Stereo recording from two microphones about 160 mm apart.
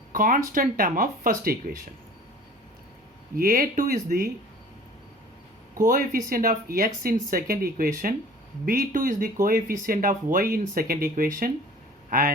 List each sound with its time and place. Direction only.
0.1 s speech: 60° right (ahead or behind)
3.3 s speech: 60° right (ahead or behind)
5.7 s speech: 55° right (ahead or behind)